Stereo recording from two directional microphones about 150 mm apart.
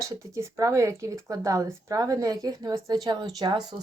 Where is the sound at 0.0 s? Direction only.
20° right (ahead or behind).